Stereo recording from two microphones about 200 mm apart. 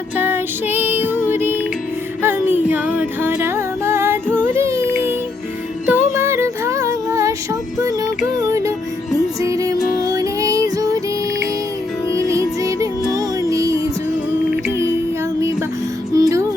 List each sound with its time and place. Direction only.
0.2 s music: 10° right (ahead or behind)
12.1 s music: 15° right (ahead or behind)
16.1 s music: 15° right (ahead or behind)